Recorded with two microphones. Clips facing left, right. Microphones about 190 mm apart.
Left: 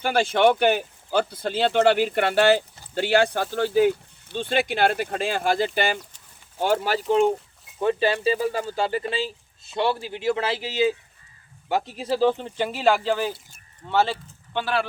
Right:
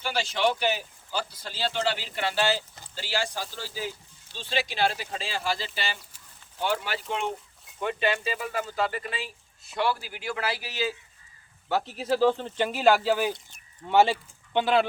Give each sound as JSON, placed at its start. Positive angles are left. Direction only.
{"t": 0.0, "sound": "speech", "side_deg": 55}
{"t": 6.8, "sound": "speech", "side_deg": 40}
{"t": 12.7, "sound": "speech", "side_deg": -5}